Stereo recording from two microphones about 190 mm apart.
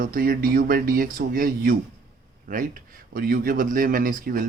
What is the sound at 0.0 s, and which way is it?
Speech, 50° right (ahead or behind).